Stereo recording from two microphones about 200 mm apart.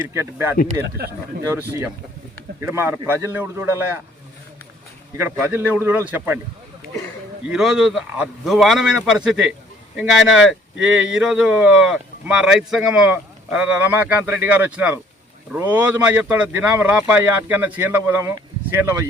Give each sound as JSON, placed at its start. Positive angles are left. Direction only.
{"t": 0.1, "sound": "speech", "side_deg": -15}
{"t": 0.9, "sound": "a man's voice", "side_deg": -55}
{"t": 1.5, "sound": "speech", "side_deg": -10}
{"t": 5.1, "sound": "speech", "side_deg": -10}
{"t": 7.4, "sound": "speech", "side_deg": 0}